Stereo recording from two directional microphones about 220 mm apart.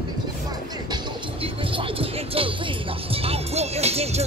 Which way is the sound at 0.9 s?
25° right (ahead or behind).